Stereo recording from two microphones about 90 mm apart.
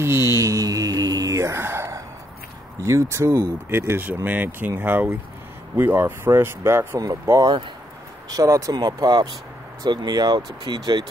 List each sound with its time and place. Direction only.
0.0 s mantra: 30° right (ahead or behind)
2.8 s speech: 35° right (ahead or behind)
3.7 s speech: 25° right (ahead or behind)
8.7 s speech: 50° right (ahead or behind)